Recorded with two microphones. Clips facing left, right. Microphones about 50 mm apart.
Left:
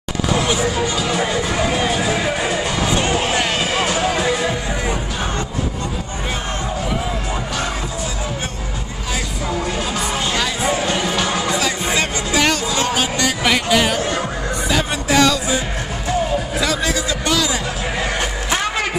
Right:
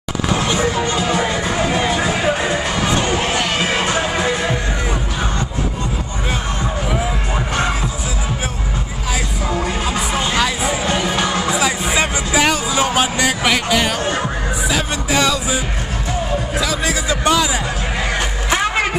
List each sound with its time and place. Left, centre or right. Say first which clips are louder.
0.6 s music: right 2 dB; right
9.9 s music: right 3 dB; centre
13.5 s a sound: left 4 dB; centre
14.7 s music: left 2 dB; centre
16.5 s a sound: right 1 dB; centre
17.1 s music: right 3 dB; right